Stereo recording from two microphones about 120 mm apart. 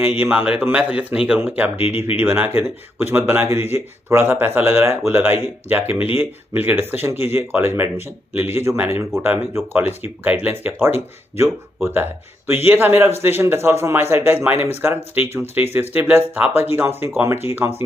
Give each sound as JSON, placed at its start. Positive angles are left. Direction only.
{"t": 0.0, "sound": "speech", "side_deg": -15}